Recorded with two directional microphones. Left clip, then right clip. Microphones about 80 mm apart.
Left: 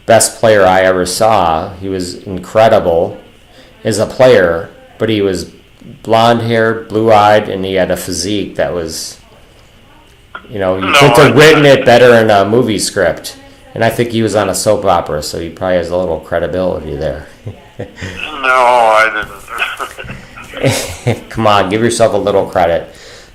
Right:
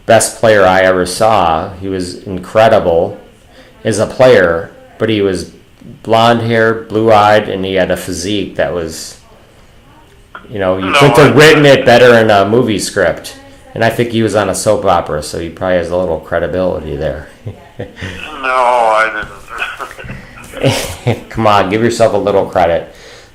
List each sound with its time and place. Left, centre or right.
0.0 s speech: centre
10.5 s speech: centre
10.8 s a man's voice: left
18.2 s a man's voice: left